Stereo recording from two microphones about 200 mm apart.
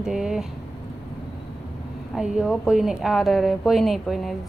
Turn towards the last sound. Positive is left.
turn(degrees=0)  # may be behind; listen again after turning